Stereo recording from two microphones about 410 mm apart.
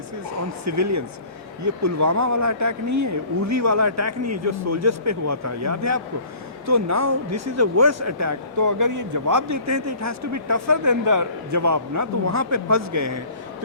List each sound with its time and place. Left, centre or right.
0.6 s a man's voice: right